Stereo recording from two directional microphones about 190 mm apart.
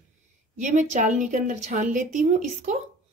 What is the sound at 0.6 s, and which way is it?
A woman's voice, 40° right (ahead or behind).